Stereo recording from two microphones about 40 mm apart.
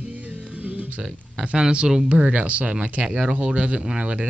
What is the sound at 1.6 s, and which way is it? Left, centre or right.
Speech, right.